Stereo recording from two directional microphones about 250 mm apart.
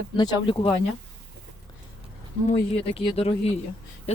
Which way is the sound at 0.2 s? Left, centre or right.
Centre.